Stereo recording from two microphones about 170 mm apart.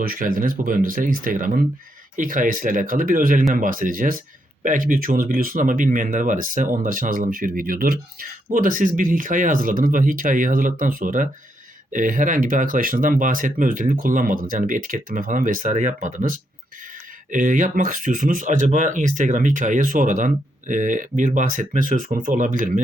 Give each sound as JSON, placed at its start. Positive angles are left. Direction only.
{"t": 0.0, "sound": "speech", "side_deg": -55}